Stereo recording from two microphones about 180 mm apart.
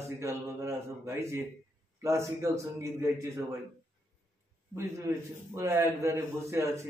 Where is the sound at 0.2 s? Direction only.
15° right (ahead or behind).